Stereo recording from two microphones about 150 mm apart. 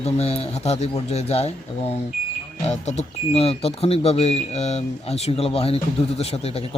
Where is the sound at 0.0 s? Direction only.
45° left (ahead or behind).